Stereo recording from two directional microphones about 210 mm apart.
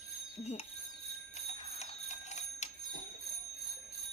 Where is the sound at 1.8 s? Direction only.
35° left (ahead or behind).